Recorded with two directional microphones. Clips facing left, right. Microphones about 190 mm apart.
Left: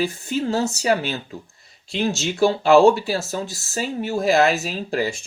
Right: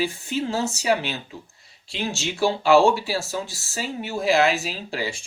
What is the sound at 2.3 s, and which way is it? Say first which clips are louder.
Speech: left 3 dB; 45° left (ahead or behind).